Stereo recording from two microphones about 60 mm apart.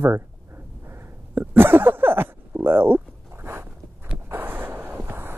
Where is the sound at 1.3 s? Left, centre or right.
Right.